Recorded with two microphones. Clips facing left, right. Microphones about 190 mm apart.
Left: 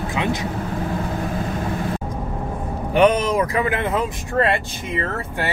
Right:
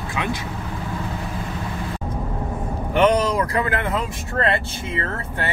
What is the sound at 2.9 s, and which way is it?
Speech, 15° left (ahead or behind).